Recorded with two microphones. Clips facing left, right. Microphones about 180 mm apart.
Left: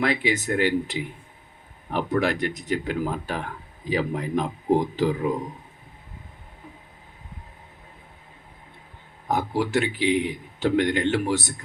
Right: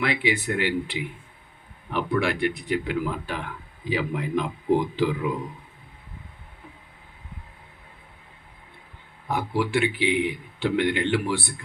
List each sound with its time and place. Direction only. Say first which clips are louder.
0.0 s a man's voice: left 1 dB; 40° left (ahead or behind)
9.2 s a man's voice: left 1 dB; 40° left (ahead or behind)